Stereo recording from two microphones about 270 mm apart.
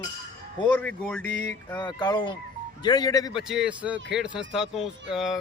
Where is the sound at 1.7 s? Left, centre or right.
Centre.